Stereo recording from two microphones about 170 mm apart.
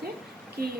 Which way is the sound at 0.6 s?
60° right (ahead or behind).